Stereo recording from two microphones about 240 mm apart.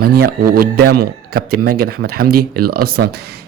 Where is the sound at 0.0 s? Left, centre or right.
Right.